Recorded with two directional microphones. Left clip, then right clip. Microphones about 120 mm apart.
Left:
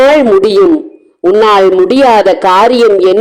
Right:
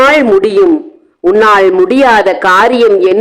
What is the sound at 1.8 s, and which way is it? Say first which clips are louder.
Speech: left 1 dB; 25° left (ahead or behind).